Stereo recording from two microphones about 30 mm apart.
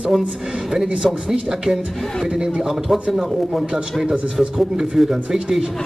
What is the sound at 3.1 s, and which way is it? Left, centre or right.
Speech, centre.